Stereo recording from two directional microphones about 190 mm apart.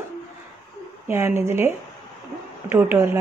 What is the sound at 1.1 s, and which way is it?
Speech, 10° right (ahead or behind).